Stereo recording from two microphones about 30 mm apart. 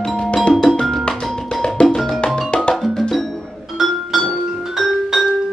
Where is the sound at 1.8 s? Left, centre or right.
Left.